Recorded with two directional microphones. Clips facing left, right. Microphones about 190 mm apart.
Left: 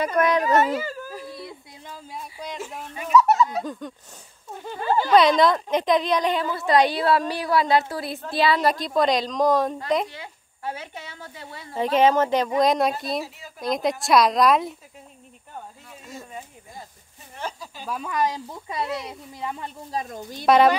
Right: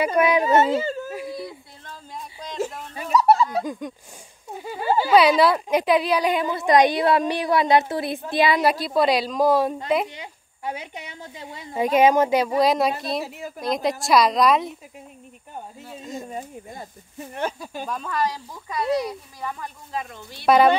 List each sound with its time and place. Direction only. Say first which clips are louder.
0.0 s speech: right 2 dB; 10° right (ahead or behind)
0.4 s speech: right 2 dB; 25° right (ahead or behind)
1.1 s whimper: right 5 dB; 15° right (ahead or behind)
1.9 s a sound: even; 10° left (ahead or behind)
2.9 s a sound: even; 35° right (ahead or behind)
3.8 s a woman's voice: right 2 dB; 10° right (ahead or behind)
15.9 s speech: right 8 dB; 20° right (ahead or behind)
17.3 s speech: right 5 dB; 60° right (ahead or behind)
17.8 s speech: left 1 dB; 5° left (ahead or behind)
18.1 s speech: left 2 dB; 20° left (ahead or behind); by 20.4 s 40° left (ahead or behind)
20.4 s a woman's voice: even; centre (ahead or behind)